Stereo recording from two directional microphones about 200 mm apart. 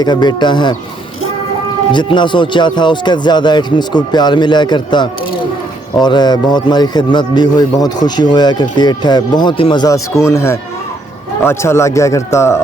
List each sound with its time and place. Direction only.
0.0 s speech: 20° left (ahead or behind)
1.9 s speech: 25° left (ahead or behind)